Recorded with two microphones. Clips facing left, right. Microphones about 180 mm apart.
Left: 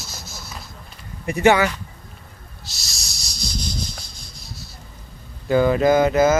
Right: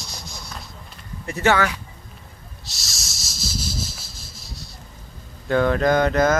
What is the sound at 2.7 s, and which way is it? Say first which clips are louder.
Rub: right 1 dB; centre (ahead or behind).